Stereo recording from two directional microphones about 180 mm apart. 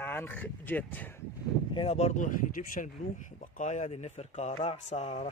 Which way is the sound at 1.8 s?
35° left (ahead or behind).